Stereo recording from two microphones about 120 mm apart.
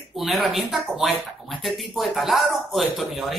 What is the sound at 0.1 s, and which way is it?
A man's voice, centre (ahead or behind).